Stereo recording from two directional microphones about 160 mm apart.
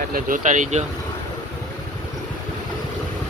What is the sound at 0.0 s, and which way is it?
Speech, 60° right (ahead or behind).